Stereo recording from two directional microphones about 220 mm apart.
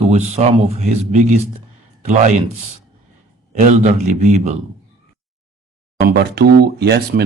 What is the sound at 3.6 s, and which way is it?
Speech, 35° right (ahead or behind).